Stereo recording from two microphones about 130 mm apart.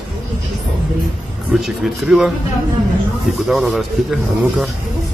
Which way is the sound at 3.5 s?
5° right (ahead or behind).